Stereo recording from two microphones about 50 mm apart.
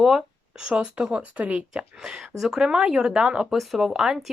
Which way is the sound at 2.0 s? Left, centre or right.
Centre.